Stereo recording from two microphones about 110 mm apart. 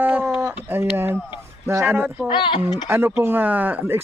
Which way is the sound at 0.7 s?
20° right (ahead or behind).